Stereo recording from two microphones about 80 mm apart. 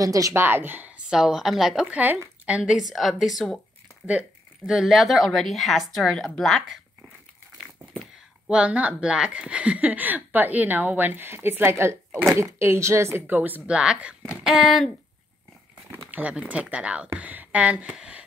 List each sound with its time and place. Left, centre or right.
0.0 s speech: right
0.3 s speech: right
1.1 s speech: centre
1.9 s speech: centre
4.0 s speech: centre
4.6 s speech: centre
8.0 s speech: centre
13.7 s speech: centre
14.4 s speech: centre
16.1 s speech: centre